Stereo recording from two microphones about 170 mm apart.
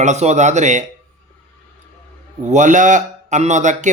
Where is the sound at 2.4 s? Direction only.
45° right (ahead or behind).